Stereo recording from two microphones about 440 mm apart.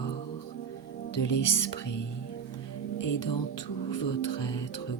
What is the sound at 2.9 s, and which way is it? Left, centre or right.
Speech, left.